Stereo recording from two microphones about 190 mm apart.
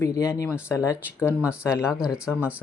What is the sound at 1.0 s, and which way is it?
Speech, 10° right (ahead or behind).